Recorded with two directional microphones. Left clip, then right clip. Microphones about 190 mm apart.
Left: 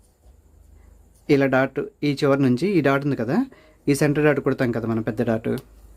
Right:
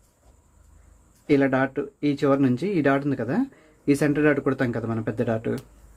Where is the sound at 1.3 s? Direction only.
35° left (ahead or behind).